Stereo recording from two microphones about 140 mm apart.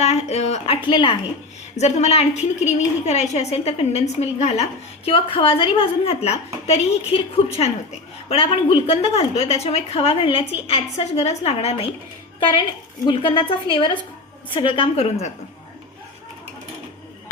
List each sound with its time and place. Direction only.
0.0 s a woman's voice: 50° left (ahead or behind)
0.9 s a woman's voice: 35° left (ahead or behind)
1.8 s a woman's voice: 50° left (ahead or behind)
8.3 s a woman's voice: 45° left (ahead or behind)
13.1 s a woman's voice: 35° left (ahead or behind)